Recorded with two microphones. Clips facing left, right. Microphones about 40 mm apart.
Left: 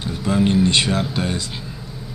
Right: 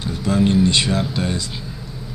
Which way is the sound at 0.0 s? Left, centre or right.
Left.